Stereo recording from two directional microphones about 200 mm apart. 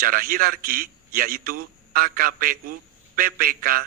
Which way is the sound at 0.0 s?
45° right (ahead or behind).